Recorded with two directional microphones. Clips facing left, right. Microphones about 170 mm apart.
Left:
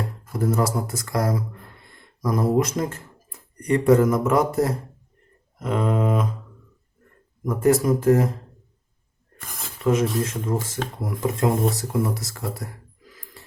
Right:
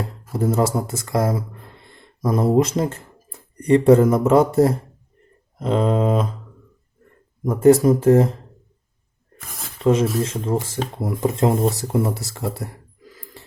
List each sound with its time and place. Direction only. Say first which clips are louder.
0.3 s speech: right 3 dB; 25° right (ahead or behind)
7.4 s speech: right 6 dB; 25° right (ahead or behind)
9.4 s a sound: even; centre (ahead or behind)
9.8 s speech: right 3 dB; 30° right (ahead or behind)